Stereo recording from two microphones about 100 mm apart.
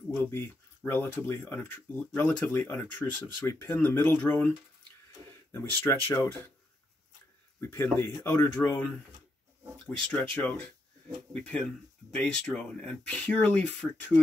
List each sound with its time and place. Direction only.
0.1 s speech: 25° left (ahead or behind)
5.5 s speech: 25° left (ahead or behind)
8.2 s speech: 20° left (ahead or behind)
9.8 s speech: 10° left (ahead or behind)